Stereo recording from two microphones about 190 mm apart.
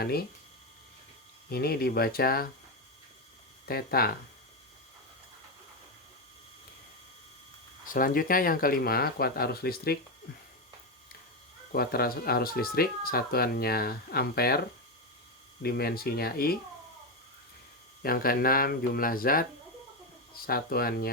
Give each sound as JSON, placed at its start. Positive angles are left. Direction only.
{"t": 0.0, "sound": "speech", "side_deg": 55}
{"t": 1.5, "sound": "speech", "side_deg": 55}
{"t": 3.7, "sound": "speech", "side_deg": 55}
{"t": 7.9, "sound": "speech", "side_deg": 45}
{"t": 11.7, "sound": "speech", "side_deg": 50}
{"t": 15.6, "sound": "speech", "side_deg": 55}
{"t": 18.0, "sound": "speech", "side_deg": 50}